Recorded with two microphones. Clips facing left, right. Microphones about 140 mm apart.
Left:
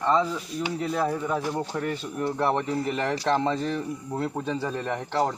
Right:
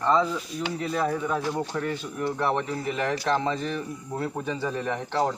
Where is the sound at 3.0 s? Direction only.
35° left (ahead or behind).